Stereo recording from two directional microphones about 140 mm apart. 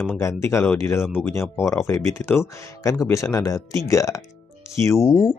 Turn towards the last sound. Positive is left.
turn(degrees=20)  # may be behind; listen again after turning